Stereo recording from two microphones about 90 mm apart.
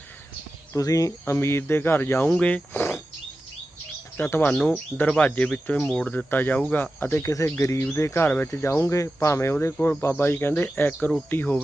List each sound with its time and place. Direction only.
0.7 s speech: 40° left (ahead or behind)
4.2 s speech: 25° left (ahead or behind)
7.0 s speech: 30° left (ahead or behind)